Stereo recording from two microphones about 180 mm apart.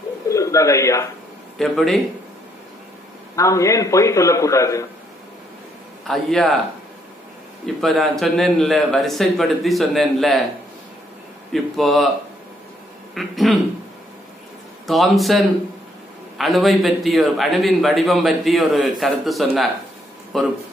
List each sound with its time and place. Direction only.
0.3 s speech: 15° left (ahead or behind)
1.6 s a man's voice: 5° left (ahead or behind)
3.3 s a man's voice: 15° left (ahead or behind)
6.0 s a man's voice: centre (ahead or behind)
7.6 s a man's voice: centre (ahead or behind)
11.5 s a man's voice: centre (ahead or behind)
13.1 s a man's voice: centre (ahead or behind)
14.9 s a man's voice: centre (ahead or behind)